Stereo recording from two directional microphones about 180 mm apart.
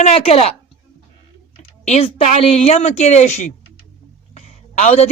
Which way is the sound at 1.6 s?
35° left (ahead or behind).